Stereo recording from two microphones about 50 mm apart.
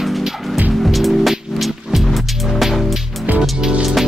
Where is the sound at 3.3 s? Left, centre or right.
Right.